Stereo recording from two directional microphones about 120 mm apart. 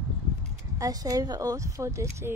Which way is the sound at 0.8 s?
30° right (ahead or behind).